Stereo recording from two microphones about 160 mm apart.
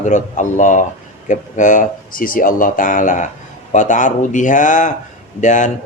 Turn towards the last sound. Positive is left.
turn(degrees=50)  # may be behind; listen again after turning